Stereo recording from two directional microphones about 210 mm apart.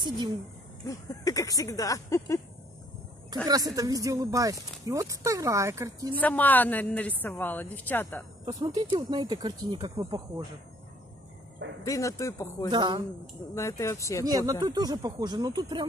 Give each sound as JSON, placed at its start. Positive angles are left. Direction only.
{"t": 0.8, "sound": "speech", "side_deg": 15}
{"t": 3.4, "sound": "speech", "side_deg": -20}
{"t": 6.1, "sound": "speech", "side_deg": 10}
{"t": 8.5, "sound": "speech", "side_deg": -20}
{"t": 11.8, "sound": "speech", "side_deg": 15}
{"t": 12.7, "sound": "speech", "side_deg": -20}
{"t": 13.6, "sound": "speech", "side_deg": 15}
{"t": 14.2, "sound": "speech", "side_deg": -15}